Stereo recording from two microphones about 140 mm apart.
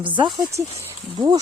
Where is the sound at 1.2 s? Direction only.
25° right (ahead or behind).